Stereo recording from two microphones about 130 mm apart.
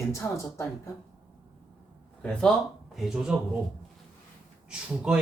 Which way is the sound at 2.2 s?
10° left (ahead or behind).